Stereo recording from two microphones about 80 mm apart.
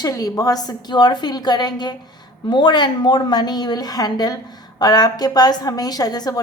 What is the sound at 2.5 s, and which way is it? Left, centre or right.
A woman's voice, left.